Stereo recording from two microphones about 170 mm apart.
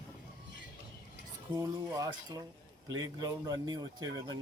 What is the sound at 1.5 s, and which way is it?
Speech, 20° right (ahead or behind).